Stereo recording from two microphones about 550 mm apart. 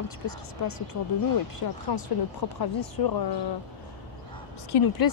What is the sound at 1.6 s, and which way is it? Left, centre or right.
Speech, left.